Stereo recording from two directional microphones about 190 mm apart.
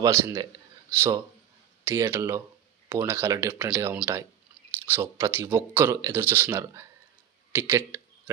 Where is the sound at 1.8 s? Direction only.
15° right (ahead or behind).